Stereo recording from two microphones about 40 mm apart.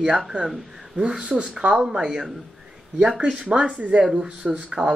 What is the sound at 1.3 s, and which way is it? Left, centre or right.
Speech, centre.